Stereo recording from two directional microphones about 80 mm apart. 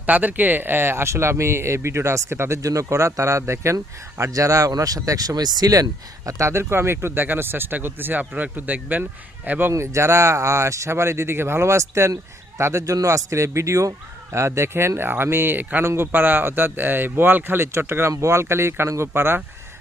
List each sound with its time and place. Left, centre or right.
0.0 s speech: right
9.7 s speech: right